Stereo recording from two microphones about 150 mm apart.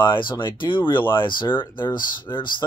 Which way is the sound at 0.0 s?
35° left (ahead or behind).